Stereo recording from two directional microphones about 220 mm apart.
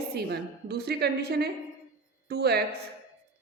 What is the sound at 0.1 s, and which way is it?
A woman's voice, 45° right (ahead or behind).